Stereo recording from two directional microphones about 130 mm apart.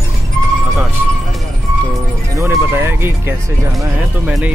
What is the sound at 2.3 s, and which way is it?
Speech, 20° right (ahead or behind).